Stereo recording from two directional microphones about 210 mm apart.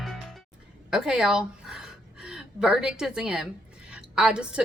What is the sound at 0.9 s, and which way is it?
A woman's voice, centre (ahead or behind).